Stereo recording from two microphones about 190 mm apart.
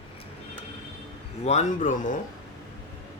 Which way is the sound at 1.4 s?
35° left (ahead or behind).